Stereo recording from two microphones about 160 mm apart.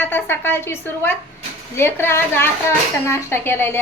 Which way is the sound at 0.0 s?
15° left (ahead or behind).